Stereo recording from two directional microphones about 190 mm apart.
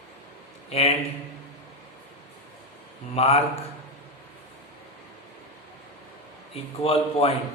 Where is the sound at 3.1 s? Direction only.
35° left (ahead or behind).